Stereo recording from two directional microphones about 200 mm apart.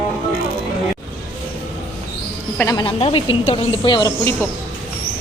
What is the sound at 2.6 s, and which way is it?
A woman's voice, 20° left (ahead or behind).